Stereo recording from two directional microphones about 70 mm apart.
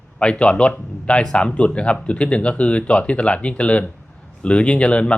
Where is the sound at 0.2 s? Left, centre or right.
Centre.